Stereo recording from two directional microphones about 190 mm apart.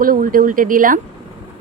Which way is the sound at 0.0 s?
50° right (ahead or behind).